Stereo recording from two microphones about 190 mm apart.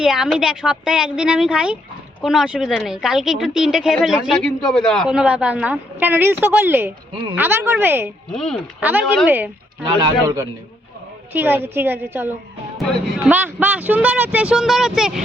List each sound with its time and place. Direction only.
0.0 s a woman's voice: 5° right (ahead or behind)
8.3 s a woman's voice: centre (ahead or behind)
8.8 s speech: 10° right (ahead or behind)